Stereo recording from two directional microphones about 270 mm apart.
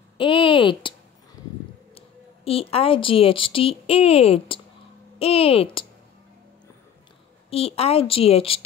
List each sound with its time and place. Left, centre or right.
0.2 s speech: centre
2.0 s a woman's voice: left
7.4 s a woman's voice: left